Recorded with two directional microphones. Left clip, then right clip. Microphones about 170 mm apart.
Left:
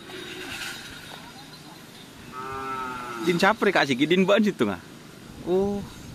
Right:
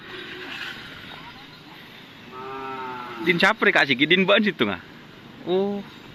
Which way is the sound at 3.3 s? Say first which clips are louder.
Right 3 dB; 5° left (ahead or behind).